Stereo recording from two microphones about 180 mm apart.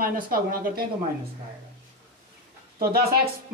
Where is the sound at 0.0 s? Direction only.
55° right (ahead or behind).